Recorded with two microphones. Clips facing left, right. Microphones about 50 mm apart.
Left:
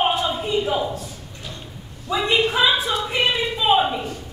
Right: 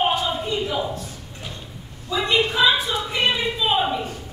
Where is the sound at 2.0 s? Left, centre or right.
Centre.